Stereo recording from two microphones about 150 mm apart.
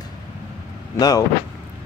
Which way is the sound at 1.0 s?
25° left (ahead or behind).